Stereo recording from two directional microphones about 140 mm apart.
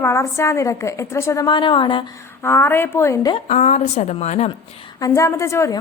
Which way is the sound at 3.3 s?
55° left (ahead or behind).